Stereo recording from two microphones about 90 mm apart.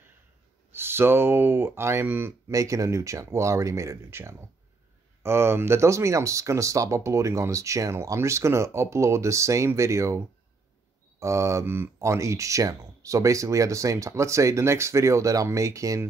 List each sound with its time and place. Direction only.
0.7 s speech: 25° right (ahead or behind)
2.5 s speech: 35° right (ahead or behind)